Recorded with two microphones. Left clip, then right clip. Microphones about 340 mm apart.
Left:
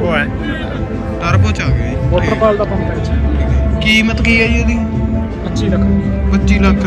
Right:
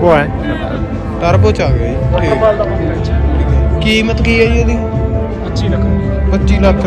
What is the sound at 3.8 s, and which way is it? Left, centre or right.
Speech, centre.